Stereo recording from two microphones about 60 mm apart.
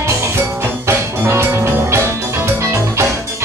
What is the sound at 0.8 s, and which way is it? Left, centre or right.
Music, right.